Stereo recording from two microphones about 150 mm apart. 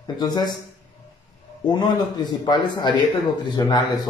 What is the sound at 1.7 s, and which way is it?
A man's voice, 30° left (ahead or behind).